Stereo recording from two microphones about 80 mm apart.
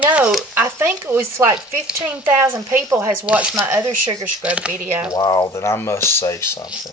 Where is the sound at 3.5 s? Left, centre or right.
Right.